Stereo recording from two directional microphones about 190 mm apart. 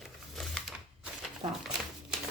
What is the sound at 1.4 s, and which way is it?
Speech, 20° right (ahead or behind).